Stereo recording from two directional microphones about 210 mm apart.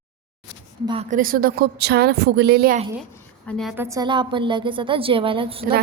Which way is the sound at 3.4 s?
5° left (ahead or behind).